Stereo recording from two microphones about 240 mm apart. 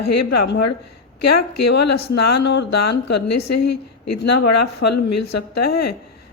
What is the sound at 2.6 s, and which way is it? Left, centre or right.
A woman's voice, left.